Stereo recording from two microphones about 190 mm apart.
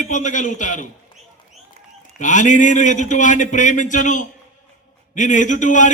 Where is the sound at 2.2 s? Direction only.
40° left (ahead or behind).